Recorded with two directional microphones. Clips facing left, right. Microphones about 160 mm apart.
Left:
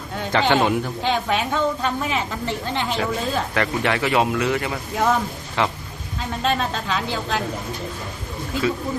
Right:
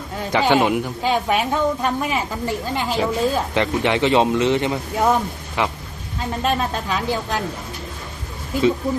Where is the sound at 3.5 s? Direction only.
20° right (ahead or behind).